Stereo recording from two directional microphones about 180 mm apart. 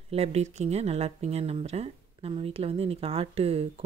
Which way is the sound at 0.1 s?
35° right (ahead or behind).